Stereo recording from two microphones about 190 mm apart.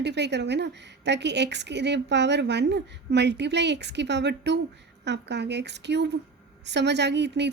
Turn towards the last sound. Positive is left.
turn(degrees=-65)  # may be behind; listen again after turning